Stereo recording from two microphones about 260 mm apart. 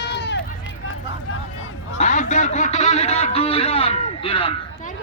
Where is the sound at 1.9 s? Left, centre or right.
Left.